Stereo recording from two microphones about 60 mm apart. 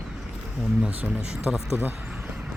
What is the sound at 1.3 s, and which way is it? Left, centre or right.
Speech, centre.